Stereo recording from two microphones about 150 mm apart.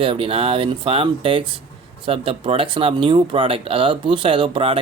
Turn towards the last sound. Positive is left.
turn(degrees=-35)  # may be behind; listen again after turning